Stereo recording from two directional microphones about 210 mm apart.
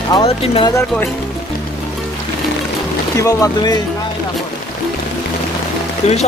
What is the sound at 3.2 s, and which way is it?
Speech, 15° left (ahead or behind).